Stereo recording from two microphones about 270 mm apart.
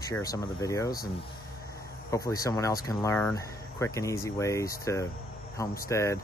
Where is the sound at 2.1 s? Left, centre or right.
Centre.